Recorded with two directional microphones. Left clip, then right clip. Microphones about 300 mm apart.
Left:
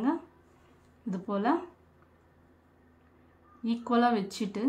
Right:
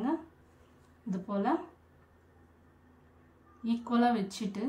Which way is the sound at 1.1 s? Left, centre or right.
Centre.